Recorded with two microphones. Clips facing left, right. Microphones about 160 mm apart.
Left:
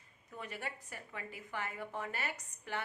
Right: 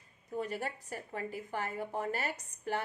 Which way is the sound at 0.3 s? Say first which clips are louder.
Right 8 dB; 35° right (ahead or behind).